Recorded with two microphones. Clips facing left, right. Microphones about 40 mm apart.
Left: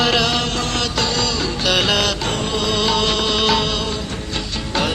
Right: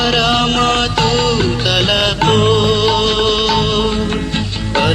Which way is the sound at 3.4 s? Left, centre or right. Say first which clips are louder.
Right 3 dB; centre.